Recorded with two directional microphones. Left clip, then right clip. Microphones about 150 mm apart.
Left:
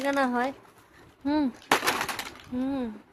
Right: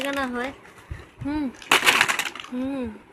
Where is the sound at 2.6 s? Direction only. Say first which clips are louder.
Right 1 dB; 15° left (ahead or behind).